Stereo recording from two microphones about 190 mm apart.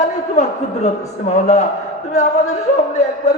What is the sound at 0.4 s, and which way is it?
Speech, 40° left (ahead or behind).